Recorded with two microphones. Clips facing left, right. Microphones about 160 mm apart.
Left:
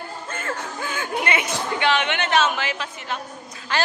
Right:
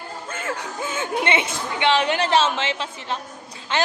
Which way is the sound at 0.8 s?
25° right (ahead or behind).